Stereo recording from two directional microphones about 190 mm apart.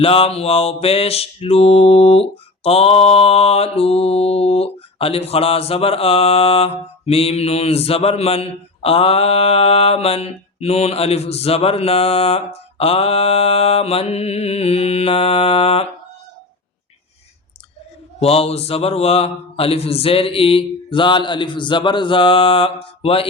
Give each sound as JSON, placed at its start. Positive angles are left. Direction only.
{"t": 0.0, "sound": "mantra", "side_deg": 30}
{"t": 18.2, "sound": "a man's voice", "side_deg": 30}